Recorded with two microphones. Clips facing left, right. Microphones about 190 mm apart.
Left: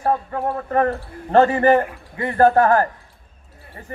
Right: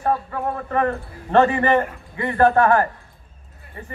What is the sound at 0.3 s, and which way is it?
A man's voice, 35° left (ahead or behind).